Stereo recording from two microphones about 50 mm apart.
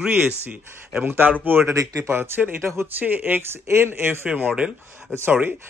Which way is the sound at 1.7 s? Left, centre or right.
Right.